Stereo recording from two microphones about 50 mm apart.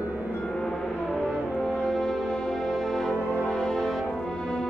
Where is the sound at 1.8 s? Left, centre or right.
Centre.